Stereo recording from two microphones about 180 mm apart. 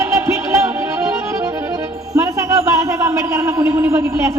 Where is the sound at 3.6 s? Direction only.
15° right (ahead or behind).